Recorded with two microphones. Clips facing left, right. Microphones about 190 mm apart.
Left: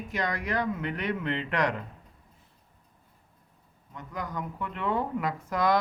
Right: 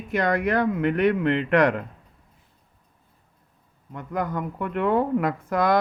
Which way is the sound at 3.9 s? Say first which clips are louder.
Right 9 dB; 55° right (ahead or behind).